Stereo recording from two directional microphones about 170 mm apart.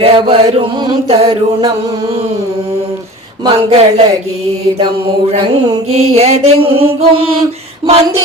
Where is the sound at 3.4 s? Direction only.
35° right (ahead or behind).